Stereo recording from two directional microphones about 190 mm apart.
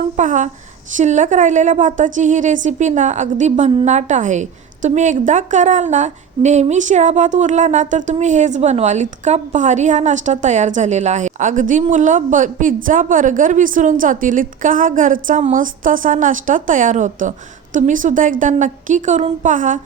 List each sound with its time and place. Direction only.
0.2 s a woman's voice: 40° right (ahead or behind)